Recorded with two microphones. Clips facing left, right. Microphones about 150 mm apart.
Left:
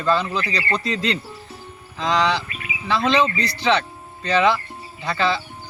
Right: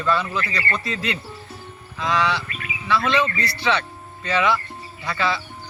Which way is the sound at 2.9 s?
30° left (ahead or behind).